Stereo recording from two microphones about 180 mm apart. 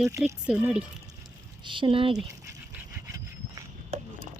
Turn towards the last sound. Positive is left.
turn(degrees=-35)  # may be behind; listen again after turning